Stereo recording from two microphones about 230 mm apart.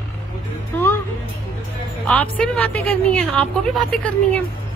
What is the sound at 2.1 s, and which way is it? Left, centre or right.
A woman's voice, centre.